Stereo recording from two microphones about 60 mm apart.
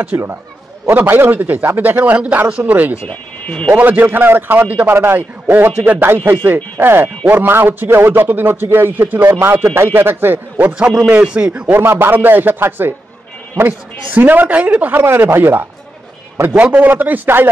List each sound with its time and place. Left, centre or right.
0.1 s a man's voice: right
3.1 s speech: left
3.7 s a man's voice: right
10.7 s a man's voice: centre
11.9 s a man's voice: right
15.0 s a man's voice: right
16.4 s a man's voice: right
16.8 s a man's voice: right